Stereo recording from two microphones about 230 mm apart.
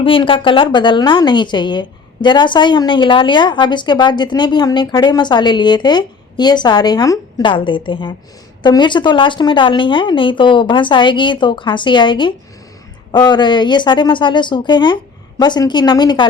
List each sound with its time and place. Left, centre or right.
0.0 s a woman's voice: left